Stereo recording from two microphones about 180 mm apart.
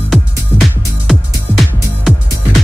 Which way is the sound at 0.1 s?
Centre (ahead or behind).